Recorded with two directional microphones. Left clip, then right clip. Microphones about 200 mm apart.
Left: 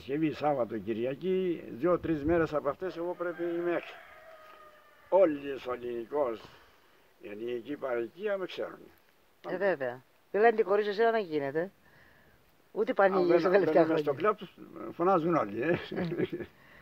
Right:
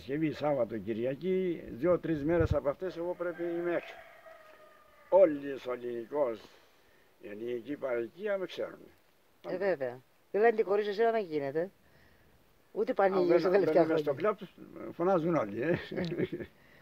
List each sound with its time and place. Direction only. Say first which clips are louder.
0.0 s speech: left 2 dB; centre (ahead or behind)
5.1 s speech: right 1 dB; centre (ahead or behind)
9.5 s a man's voice: left 2 dB; 25° left (ahead or behind)
12.7 s a man's voice: left 2 dB; 25° left (ahead or behind)
13.9 s speech: left 2 dB; centre (ahead or behind)